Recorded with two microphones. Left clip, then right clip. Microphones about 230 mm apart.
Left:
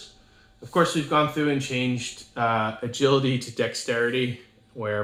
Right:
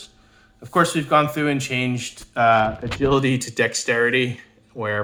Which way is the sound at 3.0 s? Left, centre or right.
Right.